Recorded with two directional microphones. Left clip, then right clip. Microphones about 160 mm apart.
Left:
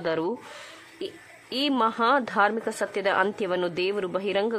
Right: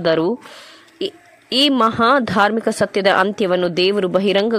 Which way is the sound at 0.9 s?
40° right (ahead or behind).